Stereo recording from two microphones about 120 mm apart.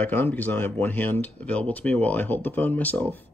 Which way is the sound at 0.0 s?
15° left (ahead or behind).